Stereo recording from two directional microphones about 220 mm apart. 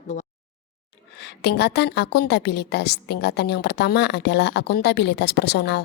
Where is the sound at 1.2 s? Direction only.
50° left (ahead or behind).